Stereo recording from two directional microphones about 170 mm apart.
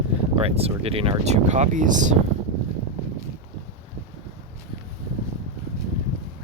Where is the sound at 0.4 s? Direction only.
35° right (ahead or behind).